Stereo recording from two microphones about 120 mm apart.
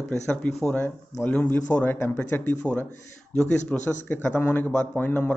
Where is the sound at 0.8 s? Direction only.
20° left (ahead or behind).